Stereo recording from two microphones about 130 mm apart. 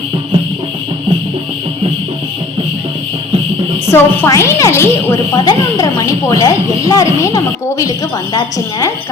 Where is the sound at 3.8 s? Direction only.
15° left (ahead or behind).